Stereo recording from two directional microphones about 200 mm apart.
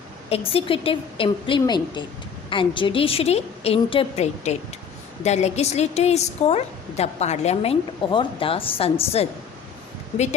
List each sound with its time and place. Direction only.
0.3 s a woman's voice: 30° left (ahead or behind)